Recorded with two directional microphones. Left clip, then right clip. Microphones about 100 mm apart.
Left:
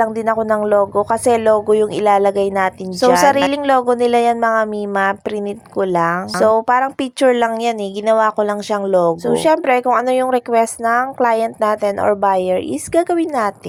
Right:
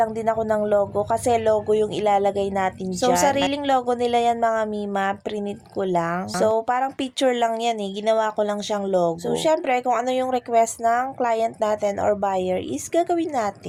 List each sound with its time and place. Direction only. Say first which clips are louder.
0.0 s speech: left 5 dB; 40° left (ahead or behind)